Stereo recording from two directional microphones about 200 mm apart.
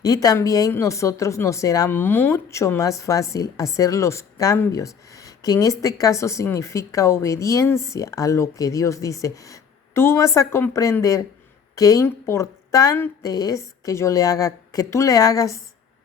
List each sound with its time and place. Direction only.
0.0 s speech: 15° left (ahead or behind)